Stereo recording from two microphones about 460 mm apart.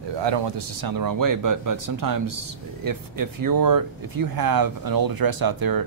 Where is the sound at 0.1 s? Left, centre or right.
Right.